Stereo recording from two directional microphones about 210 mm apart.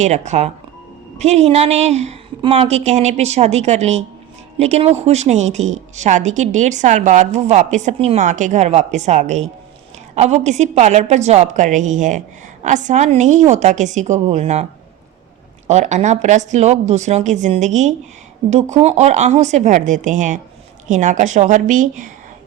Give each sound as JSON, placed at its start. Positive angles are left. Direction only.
{"t": 0.0, "sound": "a woman's voice", "side_deg": -35}